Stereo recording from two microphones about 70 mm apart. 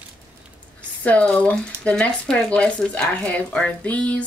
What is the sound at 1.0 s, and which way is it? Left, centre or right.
Speech, centre.